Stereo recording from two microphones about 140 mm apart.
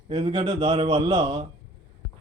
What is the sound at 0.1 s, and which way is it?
Speech, 40° right (ahead or behind).